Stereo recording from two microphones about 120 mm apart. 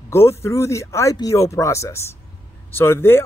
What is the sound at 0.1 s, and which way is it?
Speech, 20° left (ahead or behind).